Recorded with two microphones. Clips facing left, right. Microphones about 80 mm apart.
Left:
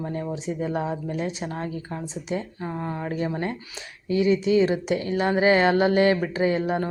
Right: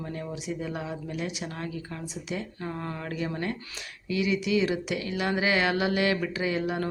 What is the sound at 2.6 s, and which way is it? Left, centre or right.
Speech, centre.